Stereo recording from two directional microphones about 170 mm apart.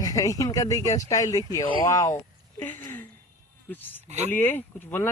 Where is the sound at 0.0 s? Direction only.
20° left (ahead or behind).